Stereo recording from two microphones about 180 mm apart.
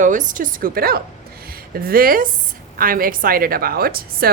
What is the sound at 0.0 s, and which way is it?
A woman's voice, 45° right (ahead or behind).